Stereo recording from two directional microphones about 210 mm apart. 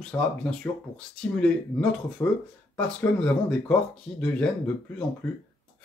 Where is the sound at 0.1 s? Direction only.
10° left (ahead or behind).